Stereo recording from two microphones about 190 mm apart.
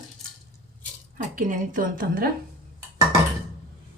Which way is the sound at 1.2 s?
45° right (ahead or behind).